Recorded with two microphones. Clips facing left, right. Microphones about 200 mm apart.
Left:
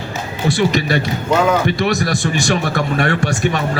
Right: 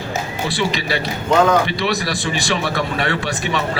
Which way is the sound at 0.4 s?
45° left (ahead or behind).